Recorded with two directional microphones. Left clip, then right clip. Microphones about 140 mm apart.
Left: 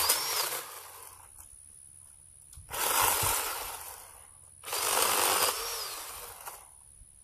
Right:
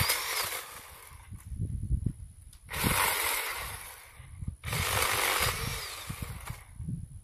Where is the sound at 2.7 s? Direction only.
10° right (ahead or behind).